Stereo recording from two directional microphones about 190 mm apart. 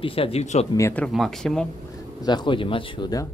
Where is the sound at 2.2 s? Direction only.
20° left (ahead or behind).